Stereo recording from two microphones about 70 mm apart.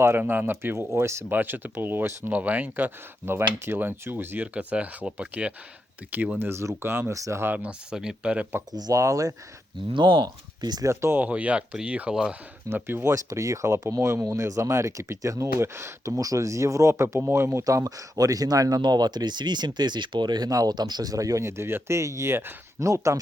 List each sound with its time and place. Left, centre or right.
0.2 s speech: right
1.3 s speech: right
4.5 s speech: centre
6.4 s speech: right
7.4 s speech: right
8.9 s speech: right
10.0 s speech: right
10.8 s speech: right
11.2 s speech: right
12.6 s speech: right
13.1 s speech: right
16.1 s speech: right
22.8 s speech: right